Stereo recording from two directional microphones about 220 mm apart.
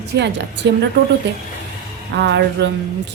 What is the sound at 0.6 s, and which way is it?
Speech, 50° right (ahead or behind).